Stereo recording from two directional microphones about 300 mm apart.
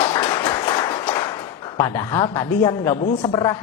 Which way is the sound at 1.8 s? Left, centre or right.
Centre.